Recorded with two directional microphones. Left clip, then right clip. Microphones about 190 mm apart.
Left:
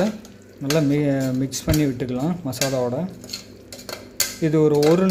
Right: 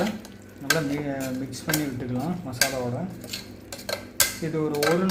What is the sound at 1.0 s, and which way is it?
Speech, 50° left (ahead or behind).